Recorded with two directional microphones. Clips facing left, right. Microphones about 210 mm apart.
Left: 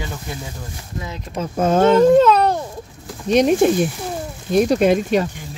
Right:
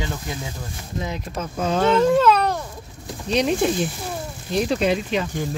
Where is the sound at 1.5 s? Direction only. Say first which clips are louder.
Left 5 dB; 50° left (ahead or behind).